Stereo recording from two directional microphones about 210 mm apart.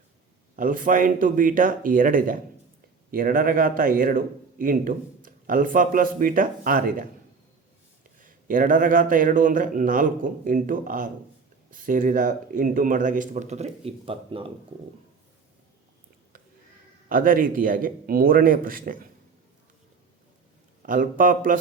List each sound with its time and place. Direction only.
0.5 s speech: 40° right (ahead or behind)
8.2 s speech: 40° right (ahead or behind)
17.1 s speech: 40° right (ahead or behind)
20.8 s speech: 40° right (ahead or behind)